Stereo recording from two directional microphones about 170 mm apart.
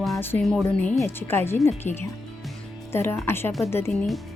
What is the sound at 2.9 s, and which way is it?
Speech, 15° left (ahead or behind).